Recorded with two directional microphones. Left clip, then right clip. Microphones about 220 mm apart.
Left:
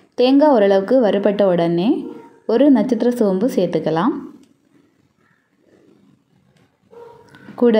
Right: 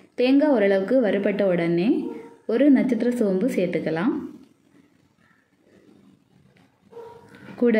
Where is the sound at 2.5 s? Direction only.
5° right (ahead or behind).